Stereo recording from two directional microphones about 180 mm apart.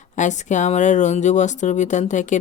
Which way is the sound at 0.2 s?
40° left (ahead or behind).